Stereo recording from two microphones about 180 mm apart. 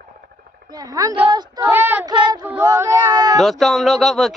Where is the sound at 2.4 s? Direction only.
10° right (ahead or behind).